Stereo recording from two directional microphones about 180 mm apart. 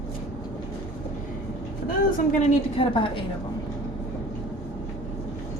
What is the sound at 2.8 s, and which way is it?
Speech, 30° left (ahead or behind).